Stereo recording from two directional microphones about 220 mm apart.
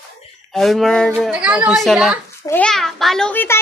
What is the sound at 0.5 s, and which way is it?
A child's voice, centre (ahead or behind).